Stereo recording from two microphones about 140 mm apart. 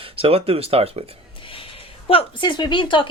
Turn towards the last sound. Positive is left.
turn(degrees=35)  # may be behind; listen again after turning